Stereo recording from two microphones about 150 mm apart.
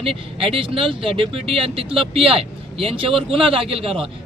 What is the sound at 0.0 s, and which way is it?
Speech, 40° right (ahead or behind).